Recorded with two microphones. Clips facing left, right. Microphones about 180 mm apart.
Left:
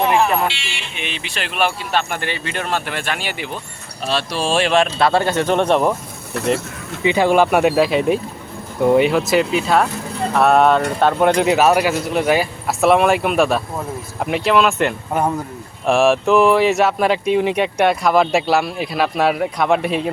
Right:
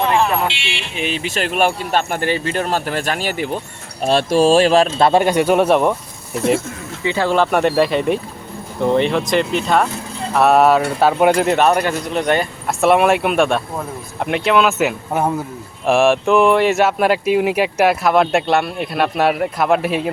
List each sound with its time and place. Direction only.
0.0 s vehicle: 15° left (ahead or behind)
0.9 s speech: 40° right (ahead or behind)
5.0 s speech: 15° right (ahead or behind)
7.0 s speech: 15° left (ahead or behind); by 20.1 s centre (ahead or behind)